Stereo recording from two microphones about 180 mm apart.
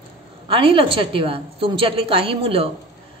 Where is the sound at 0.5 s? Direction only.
30° right (ahead or behind).